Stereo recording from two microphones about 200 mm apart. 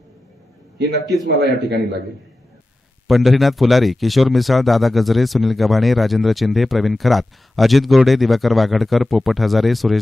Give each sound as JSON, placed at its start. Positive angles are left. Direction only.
{"t": 0.8, "sound": "a man's voice", "side_deg": -55}
{"t": 3.1, "sound": "speech", "side_deg": 0}